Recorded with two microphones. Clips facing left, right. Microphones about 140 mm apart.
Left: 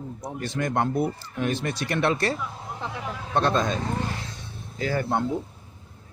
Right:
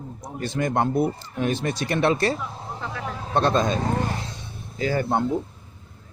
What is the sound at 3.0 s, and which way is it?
Vehicle, 30° right (ahead or behind).